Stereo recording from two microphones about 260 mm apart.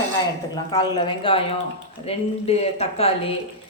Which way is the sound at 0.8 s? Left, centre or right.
Centre.